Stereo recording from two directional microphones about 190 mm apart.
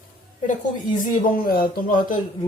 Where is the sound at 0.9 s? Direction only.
45° left (ahead or behind).